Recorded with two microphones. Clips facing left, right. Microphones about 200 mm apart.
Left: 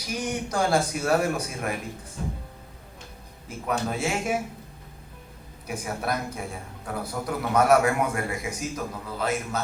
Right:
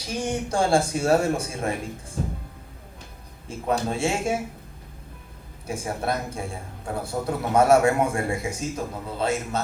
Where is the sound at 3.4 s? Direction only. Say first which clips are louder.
Right 3 dB; 25° right (ahead or behind).